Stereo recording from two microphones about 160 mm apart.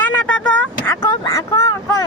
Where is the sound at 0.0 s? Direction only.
10° left (ahead or behind).